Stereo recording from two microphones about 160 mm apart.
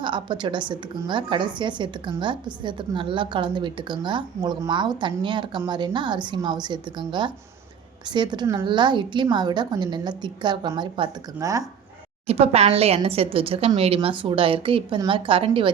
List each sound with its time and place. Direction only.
0.0 s a woman's voice: 30° right (ahead or behind)
11.3 s a woman's voice: 20° right (ahead or behind)
12.3 s a woman's voice: 40° right (ahead or behind)